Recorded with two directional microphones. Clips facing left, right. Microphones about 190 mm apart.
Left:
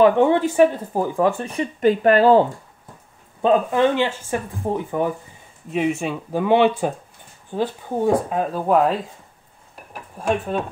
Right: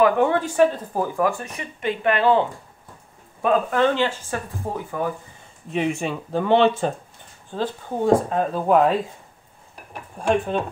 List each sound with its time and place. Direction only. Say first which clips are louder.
0.0 s speech: left 3 dB; 20° left (ahead or behind)
1.4 s speech: left 9 dB; 35° left (ahead or behind)
3.4 s speech: left 2 dB; 15° left (ahead or behind)
5.7 s speech: left 2 dB; 5° left (ahead or behind)
10.1 s speech: right 1 dB; 5° left (ahead or behind)